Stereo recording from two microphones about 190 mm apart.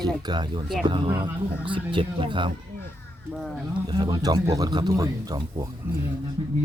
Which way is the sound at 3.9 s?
25° right (ahead or behind).